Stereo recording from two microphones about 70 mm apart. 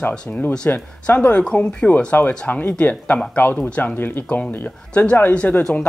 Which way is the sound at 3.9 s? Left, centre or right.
Left.